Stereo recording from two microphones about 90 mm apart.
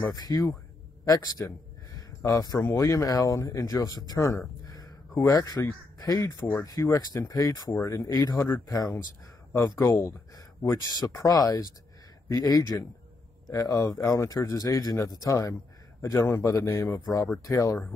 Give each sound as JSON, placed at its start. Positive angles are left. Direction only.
{"t": 0.0, "sound": "speech", "side_deg": 45}
{"t": 4.6, "sound": "a sound", "side_deg": 45}
{"t": 5.6, "sound": "speech", "side_deg": 40}
{"t": 8.4, "sound": "speech", "side_deg": 25}
{"t": 8.6, "sound": "speech", "side_deg": 40}
{"t": 9.8, "sound": "speech", "side_deg": 30}